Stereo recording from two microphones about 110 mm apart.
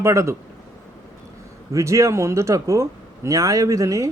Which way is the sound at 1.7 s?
30° right (ahead or behind).